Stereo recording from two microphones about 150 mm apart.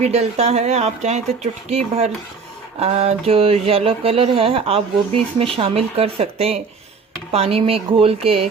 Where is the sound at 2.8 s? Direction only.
45° right (ahead or behind).